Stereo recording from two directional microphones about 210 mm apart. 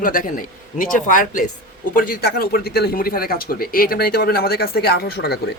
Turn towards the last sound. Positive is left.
turn(degrees=50)  # may be behind; listen again after turning